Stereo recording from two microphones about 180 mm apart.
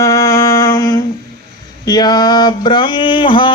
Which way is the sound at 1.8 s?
25° left (ahead or behind).